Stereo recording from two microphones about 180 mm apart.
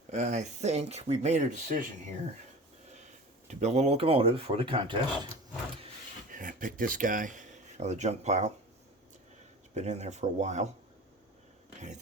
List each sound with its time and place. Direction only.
0.1 s speech: 40° right (ahead or behind)
2.9 s speech: 40° right (ahead or behind)
6.3 s speech: 45° right (ahead or behind)
9.7 s speech: 40° right (ahead or behind)